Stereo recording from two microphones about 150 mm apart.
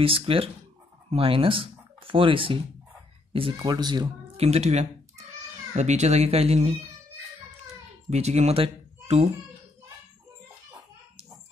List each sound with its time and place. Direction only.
0.0 s speech: 40° right (ahead or behind)
3.6 s speech: 25° right (ahead or behind)
4.4 s speech: 45° right (ahead or behind)
8.1 s speech: 45° right (ahead or behind)